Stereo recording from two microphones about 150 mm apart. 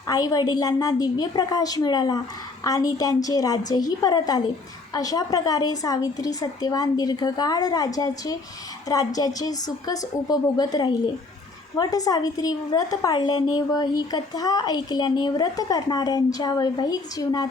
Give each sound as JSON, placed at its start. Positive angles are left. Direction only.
{"t": 0.1, "sound": "a woman's voice", "side_deg": 25}